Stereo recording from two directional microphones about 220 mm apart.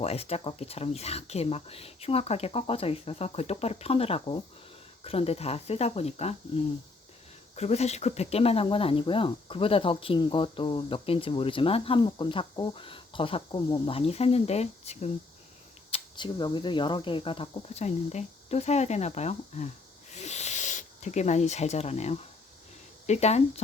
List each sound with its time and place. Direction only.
0.0 s speech: 30° left (ahead or behind)
7.5 s speech: 30° left (ahead or behind)
20.1 s owl: 30° left (ahead or behind)
23.0 s speech: 30° left (ahead or behind)